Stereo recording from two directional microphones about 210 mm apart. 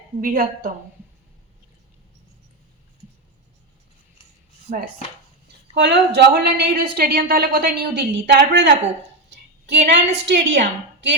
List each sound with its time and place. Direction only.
0.2 s a woman's voice: 40° right (ahead or behind)
5.7 s a woman's voice: 55° right (ahead or behind)